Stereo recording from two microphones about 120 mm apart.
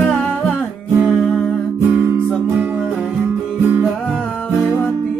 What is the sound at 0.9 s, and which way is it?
Music, 10° right (ahead or behind).